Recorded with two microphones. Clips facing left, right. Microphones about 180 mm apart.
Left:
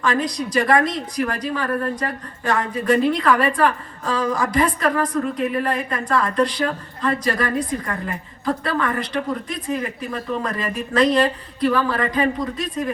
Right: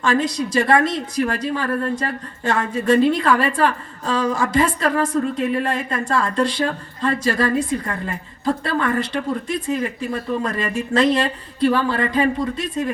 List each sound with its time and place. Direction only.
0.0 s a woman's voice: 25° right (ahead or behind)